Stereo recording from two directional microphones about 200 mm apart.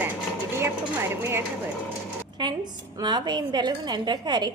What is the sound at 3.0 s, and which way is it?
A woman's voice, 20° right (ahead or behind).